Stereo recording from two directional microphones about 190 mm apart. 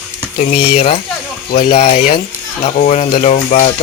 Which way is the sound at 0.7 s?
30° left (ahead or behind).